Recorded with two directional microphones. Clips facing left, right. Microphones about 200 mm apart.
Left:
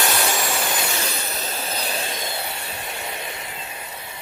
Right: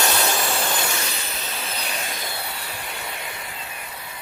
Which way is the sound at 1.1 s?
40° left (ahead or behind).